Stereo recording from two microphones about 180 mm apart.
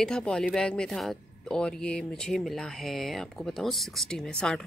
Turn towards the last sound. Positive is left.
turn(degrees=5)  # may be behind; listen again after turning